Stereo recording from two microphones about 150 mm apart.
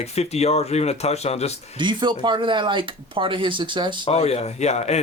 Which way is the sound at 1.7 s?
30° right (ahead or behind).